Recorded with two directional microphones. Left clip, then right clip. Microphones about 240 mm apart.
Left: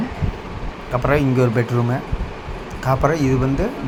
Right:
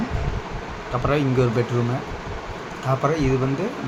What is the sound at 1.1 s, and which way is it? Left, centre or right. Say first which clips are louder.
Speech: left 3 dB; left.